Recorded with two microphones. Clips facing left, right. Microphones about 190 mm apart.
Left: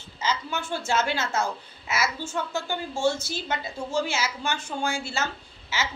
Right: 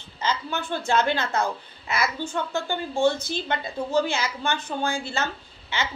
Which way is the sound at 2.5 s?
60° right (ahead or behind).